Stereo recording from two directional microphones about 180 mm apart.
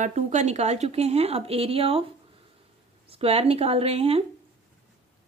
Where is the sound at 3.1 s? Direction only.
35° right (ahead or behind).